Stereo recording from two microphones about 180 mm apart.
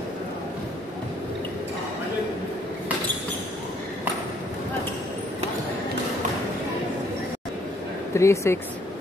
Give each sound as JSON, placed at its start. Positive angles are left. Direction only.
{"t": 8.1, "sound": "speech", "side_deg": 15}